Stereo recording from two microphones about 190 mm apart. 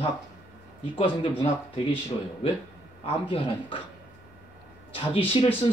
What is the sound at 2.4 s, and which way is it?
Speech, 30° left (ahead or behind).